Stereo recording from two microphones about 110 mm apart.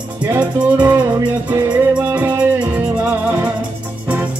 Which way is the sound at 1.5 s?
25° right (ahead or behind).